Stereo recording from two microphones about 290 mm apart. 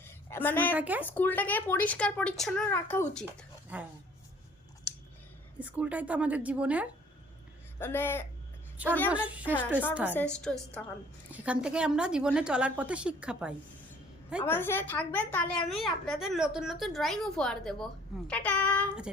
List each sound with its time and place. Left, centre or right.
0.0 s a sound: centre
0.7 s a woman's voice: centre
1.0 s a woman's voice: centre
3.7 s a woman's voice: centre
5.5 s a woman's voice: centre
7.8 s a man's voice: centre
9.0 s a woman's voice: centre
9.4 s a man's voice: centre
9.9 s a woman's voice: centre
14.4 s a woman's voice: centre